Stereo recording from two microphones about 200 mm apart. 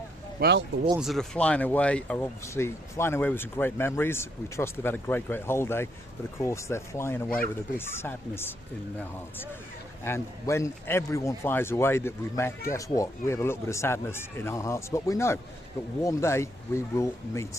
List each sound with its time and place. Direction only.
0.3 s speech: 55° right (ahead or behind)
0.9 s speech: centre (ahead or behind)
10.0 s speech: 15° left (ahead or behind)